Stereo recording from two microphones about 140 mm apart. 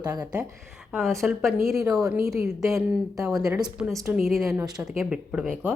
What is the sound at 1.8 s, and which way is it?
Speech, 25° right (ahead or behind).